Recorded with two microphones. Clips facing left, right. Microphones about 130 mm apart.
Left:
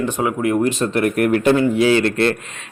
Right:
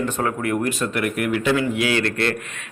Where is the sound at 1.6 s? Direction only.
30° left (ahead or behind).